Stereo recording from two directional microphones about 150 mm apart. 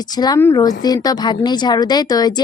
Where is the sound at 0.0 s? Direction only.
25° left (ahead or behind).